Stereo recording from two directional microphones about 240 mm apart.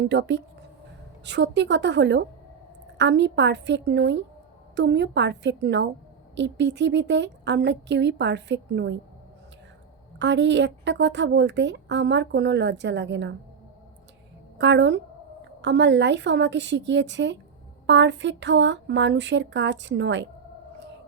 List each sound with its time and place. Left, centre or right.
0.0 s a woman's voice: right
10.2 s a woman's voice: right
14.6 s a woman's voice: right